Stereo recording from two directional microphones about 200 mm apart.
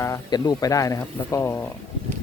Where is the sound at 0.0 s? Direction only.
20° left (ahead or behind).